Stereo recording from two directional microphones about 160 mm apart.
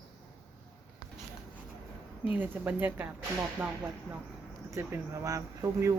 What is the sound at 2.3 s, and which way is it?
Speech, 10° right (ahead or behind).